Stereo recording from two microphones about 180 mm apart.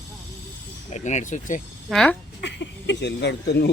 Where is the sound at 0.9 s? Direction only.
40° left (ahead or behind).